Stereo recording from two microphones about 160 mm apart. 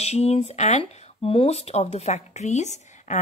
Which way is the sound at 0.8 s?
40° left (ahead or behind).